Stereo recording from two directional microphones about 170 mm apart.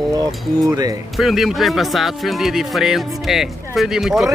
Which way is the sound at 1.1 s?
Centre (ahead or behind).